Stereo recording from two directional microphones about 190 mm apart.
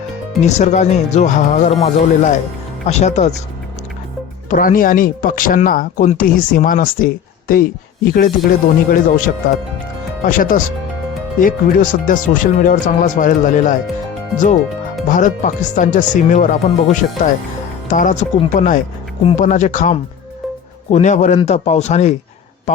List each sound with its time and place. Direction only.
0.4 s speech: 35° left (ahead or behind)
4.4 s speech: 45° left (ahead or behind)